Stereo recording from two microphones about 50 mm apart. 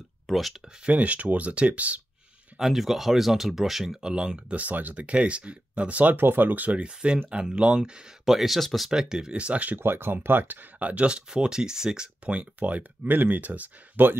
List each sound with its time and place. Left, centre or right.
0.3 s speech: centre
0.8 s speech: right
2.6 s speech: centre
4.0 s speech: centre
4.6 s speech: right
6.1 s speech: right
7.2 s speech: centre
8.3 s speech: centre
8.9 s speech: centre
9.8 s speech: right; by 12.4 s centre
12.4 s speech: right